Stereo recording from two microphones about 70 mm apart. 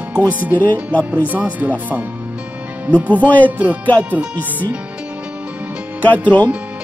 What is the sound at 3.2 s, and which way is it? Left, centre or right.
Music, left.